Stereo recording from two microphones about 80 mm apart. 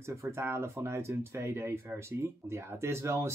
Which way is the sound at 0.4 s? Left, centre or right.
Right.